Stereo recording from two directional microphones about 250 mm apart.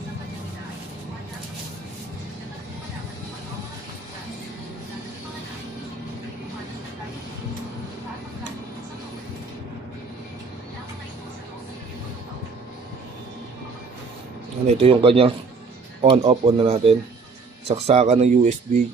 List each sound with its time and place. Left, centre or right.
14.7 s speech: right